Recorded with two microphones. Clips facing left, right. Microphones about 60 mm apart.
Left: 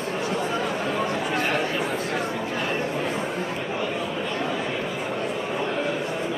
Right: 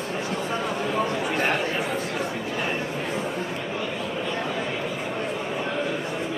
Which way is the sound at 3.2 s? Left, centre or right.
Centre.